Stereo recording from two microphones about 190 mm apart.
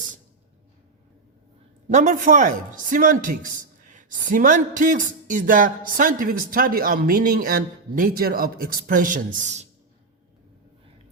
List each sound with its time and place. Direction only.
1.9 s a man's voice: 40° right (ahead or behind)